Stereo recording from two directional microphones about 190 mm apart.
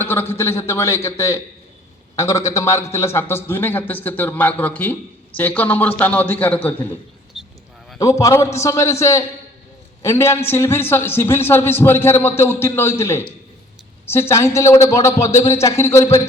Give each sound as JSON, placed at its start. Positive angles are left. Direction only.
{"t": 0.0, "sound": "a man's voice", "side_deg": 10}
{"t": 7.3, "sound": "a sound", "side_deg": 0}
{"t": 7.9, "sound": "a man's voice", "side_deg": 15}